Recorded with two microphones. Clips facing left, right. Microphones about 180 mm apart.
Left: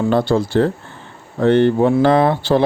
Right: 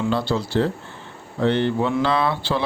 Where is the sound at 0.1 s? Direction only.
50° left (ahead or behind).